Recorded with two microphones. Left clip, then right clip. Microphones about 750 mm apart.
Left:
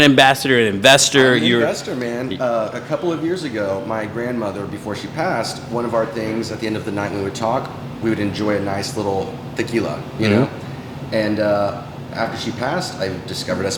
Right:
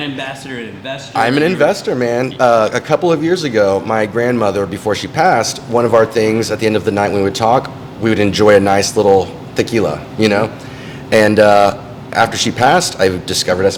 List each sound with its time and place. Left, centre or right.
0.0 s a man's voice: left
1.6 s speech: right